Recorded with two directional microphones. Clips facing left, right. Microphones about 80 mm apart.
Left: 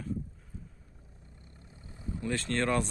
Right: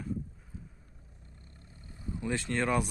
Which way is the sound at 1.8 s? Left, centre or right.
Left.